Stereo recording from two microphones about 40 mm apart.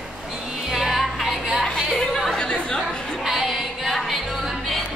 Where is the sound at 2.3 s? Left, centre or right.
Left.